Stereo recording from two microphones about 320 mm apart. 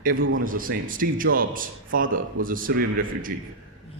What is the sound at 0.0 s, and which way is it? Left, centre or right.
Speech, right.